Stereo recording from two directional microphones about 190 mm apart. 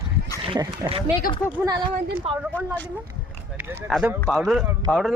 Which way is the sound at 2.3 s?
30° right (ahead or behind).